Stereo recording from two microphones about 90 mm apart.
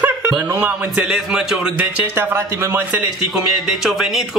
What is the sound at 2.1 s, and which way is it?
Speech, 25° right (ahead or behind).